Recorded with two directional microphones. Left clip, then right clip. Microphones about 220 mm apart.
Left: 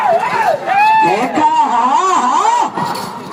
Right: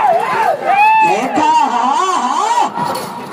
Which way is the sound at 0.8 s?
45° right (ahead or behind).